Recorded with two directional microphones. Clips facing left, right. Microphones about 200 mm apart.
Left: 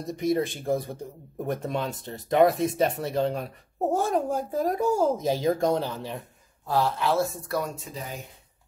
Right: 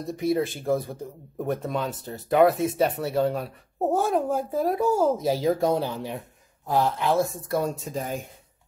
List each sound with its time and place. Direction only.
0.0 s speech: centre (ahead or behind); by 7.7 s 25° right (ahead or behind)
7.7 s speech: 45° right (ahead or behind)